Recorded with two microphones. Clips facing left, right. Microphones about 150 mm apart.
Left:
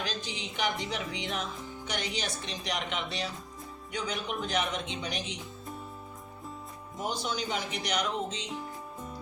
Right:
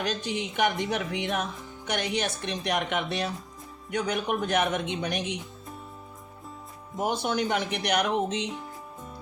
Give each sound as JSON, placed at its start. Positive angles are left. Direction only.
{"t": 0.0, "sound": "speech", "side_deg": -55}
{"t": 7.0, "sound": "speech", "side_deg": -60}